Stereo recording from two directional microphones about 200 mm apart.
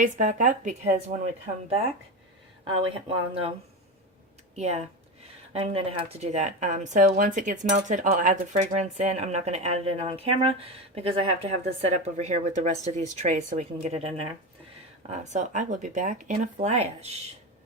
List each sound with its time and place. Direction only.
0.0 s speech: 40° right (ahead or behind)
2.6 s speech: 25° right (ahead or behind)
4.5 s speech: 35° right (ahead or behind)